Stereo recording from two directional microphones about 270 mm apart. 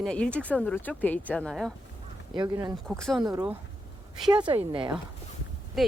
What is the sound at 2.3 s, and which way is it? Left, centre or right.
Speech, centre.